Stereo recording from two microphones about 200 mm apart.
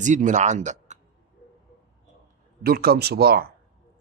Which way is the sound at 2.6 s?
50° right (ahead or behind).